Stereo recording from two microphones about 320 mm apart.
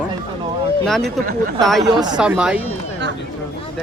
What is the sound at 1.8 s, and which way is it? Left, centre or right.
Speech, centre.